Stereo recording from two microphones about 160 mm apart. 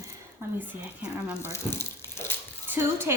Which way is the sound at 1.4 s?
15° left (ahead or behind).